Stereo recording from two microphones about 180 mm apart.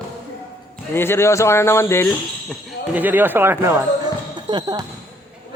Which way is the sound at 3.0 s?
10° right (ahead or behind).